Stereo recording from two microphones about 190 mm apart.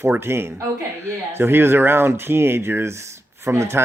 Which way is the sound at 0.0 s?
15° right (ahead or behind).